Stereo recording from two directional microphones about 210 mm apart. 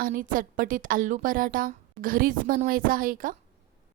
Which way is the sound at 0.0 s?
40° right (ahead or behind).